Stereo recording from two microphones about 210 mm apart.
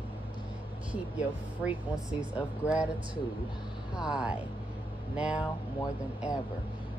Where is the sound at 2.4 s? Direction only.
5° right (ahead or behind).